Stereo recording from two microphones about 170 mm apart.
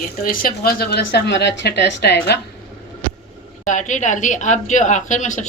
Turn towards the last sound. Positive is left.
turn(degrees=45)  # may be behind; listen again after turning